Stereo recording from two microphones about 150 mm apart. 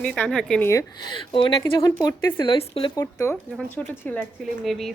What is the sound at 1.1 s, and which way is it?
Speech, 35° left (ahead or behind).